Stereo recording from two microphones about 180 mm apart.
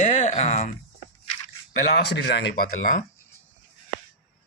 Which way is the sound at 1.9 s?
65° left (ahead or behind).